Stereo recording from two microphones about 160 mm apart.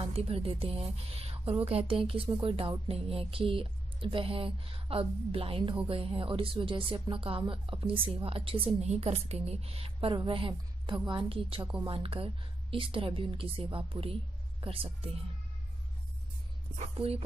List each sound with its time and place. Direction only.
0.0 s a woman's voice: 40° right (ahead or behind)
16.7 s speech: 40° right (ahead or behind)